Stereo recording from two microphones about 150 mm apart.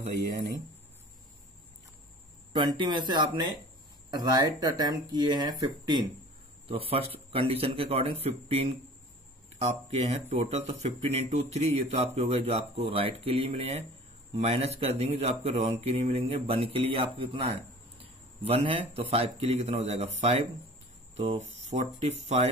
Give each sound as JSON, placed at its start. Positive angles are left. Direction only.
{"t": 2.5, "sound": "speech", "side_deg": -30}
{"t": 6.7, "sound": "speech", "side_deg": -40}
{"t": 21.6, "sound": "speech", "side_deg": -50}